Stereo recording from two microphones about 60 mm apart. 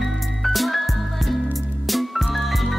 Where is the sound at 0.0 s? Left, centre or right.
Centre.